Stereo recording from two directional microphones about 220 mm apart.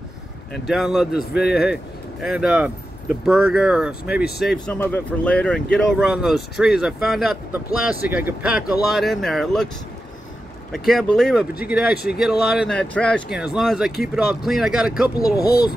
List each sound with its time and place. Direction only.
0.5 s speech: centre (ahead or behind)
1.4 s speech: 45° left (ahead or behind)
2.2 s speech: 5° right (ahead or behind)
4.6 s speech: 5° left (ahead or behind)
10.7 s speech: centre (ahead or behind)
15.1 s speech: 15° left (ahead or behind)